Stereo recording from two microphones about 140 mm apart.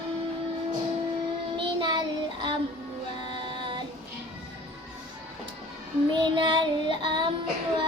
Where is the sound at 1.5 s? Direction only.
35° right (ahead or behind).